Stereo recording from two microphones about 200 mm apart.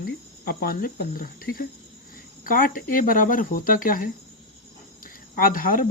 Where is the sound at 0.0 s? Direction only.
45° left (ahead or behind).